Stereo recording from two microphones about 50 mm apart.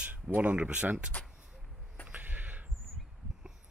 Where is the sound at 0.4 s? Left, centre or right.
Right.